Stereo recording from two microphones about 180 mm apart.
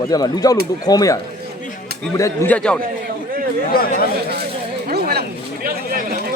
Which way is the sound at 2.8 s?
55° right (ahead or behind).